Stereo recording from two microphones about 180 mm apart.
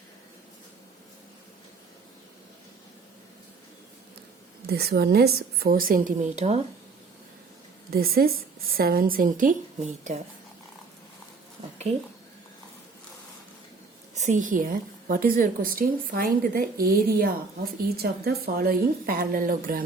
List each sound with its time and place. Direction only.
4.6 s a woman's voice: 60° right (ahead or behind); by 6.6 s 40° right (ahead or behind)
7.9 s a woman's voice: 55° right (ahead or behind)
14.2 s a woman's voice: 45° right (ahead or behind)